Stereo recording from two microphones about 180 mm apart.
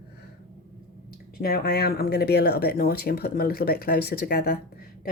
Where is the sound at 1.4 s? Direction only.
55° left (ahead or behind).